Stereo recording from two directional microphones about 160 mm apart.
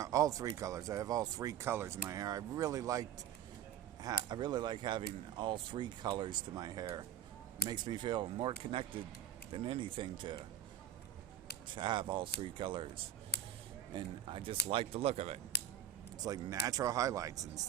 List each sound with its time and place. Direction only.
0.0 s speech: 20° right (ahead or behind)
11.7 s speech: 30° right (ahead or behind)
16.2 s speech: 25° right (ahead or behind)